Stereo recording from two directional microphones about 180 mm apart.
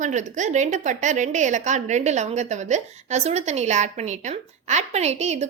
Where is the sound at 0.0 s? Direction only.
40° right (ahead or behind).